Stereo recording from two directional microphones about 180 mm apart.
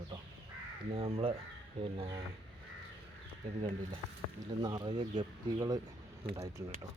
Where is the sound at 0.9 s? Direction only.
30° right (ahead or behind).